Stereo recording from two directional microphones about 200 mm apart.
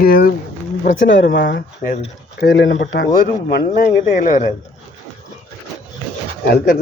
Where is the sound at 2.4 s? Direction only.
65° left (ahead or behind).